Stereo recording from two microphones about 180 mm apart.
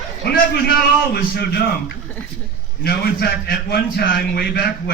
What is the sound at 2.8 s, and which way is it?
A man's voice, 60° left (ahead or behind).